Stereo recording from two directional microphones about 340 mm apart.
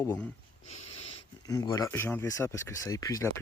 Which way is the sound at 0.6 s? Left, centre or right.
Left.